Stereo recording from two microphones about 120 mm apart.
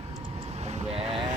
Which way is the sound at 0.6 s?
70° right (ahead or behind).